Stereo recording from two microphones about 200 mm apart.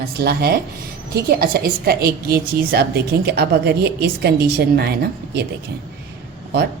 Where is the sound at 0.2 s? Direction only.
50° right (ahead or behind).